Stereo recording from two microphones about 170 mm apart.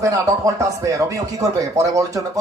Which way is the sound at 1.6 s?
20° right (ahead or behind).